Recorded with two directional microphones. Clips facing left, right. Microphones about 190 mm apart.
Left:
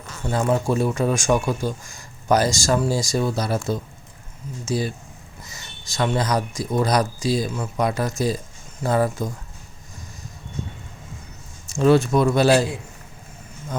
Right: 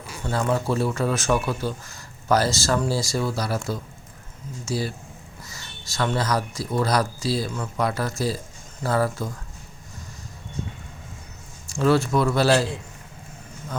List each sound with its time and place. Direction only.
0.3 s speech: 15° left (ahead or behind)
11.7 s speech: 20° left (ahead or behind)